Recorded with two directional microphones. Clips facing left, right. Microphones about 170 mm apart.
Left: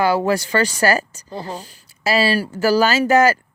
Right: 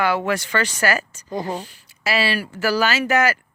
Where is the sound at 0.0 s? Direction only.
35° left (ahead or behind).